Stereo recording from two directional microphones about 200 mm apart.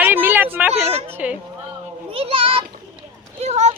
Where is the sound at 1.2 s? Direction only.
5° right (ahead or behind).